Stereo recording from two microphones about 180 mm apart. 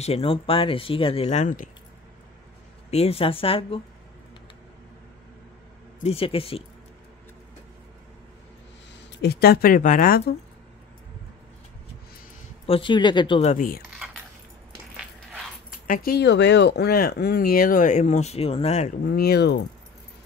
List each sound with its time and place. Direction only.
0.0 s speech: 30° left (ahead or behind)
2.9 s speech: 35° left (ahead or behind)
5.9 s speech: 35° left (ahead or behind)
9.2 s speech: 60° left (ahead or behind)
12.6 s speech: 30° left (ahead or behind)
13.6 s speech: 55° left (ahead or behind)
13.9 s squish: 5° right (ahead or behind)
15.9 s speech: 55° left (ahead or behind); by 18.9 s 40° left (ahead or behind)
19.0 s speech: 60° left (ahead or behind)